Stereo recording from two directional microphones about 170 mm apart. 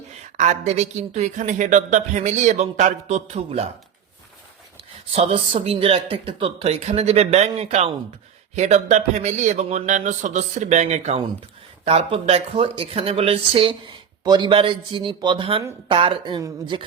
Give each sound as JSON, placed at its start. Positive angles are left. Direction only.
{"t": 0.3, "sound": "speech", "side_deg": -45}
{"t": 5.1, "sound": "speech", "side_deg": -35}